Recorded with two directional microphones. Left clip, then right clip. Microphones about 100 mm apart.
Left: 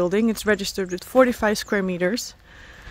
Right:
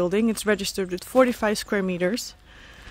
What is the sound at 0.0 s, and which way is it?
Speech, 10° left (ahead or behind).